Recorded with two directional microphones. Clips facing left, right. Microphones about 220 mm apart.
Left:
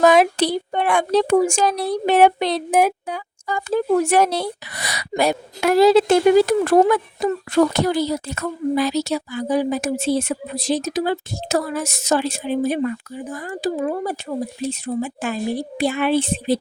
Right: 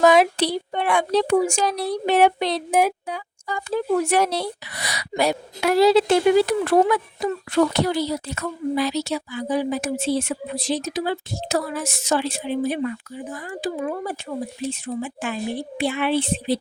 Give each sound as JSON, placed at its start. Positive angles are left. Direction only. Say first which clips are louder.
{"t": 0.0, "sound": "a woman's voice", "louder": "left 2 dB", "side_deg": 50}